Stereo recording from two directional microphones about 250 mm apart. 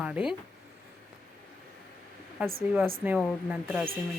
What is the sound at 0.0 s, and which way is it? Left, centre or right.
Speech, centre.